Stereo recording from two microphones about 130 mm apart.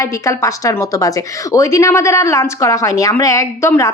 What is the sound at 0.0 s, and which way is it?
A woman's voice, 25° left (ahead or behind).